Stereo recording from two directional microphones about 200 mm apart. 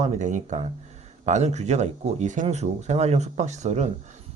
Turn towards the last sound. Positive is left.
turn(degrees=-35)  # may be behind; listen again after turning